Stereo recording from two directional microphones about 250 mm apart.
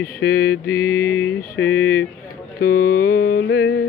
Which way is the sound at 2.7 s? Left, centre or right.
Left.